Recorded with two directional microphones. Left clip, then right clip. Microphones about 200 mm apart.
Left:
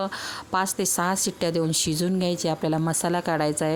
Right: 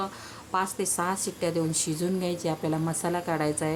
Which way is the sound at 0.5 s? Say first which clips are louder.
Left 3 dB; 45° left (ahead or behind).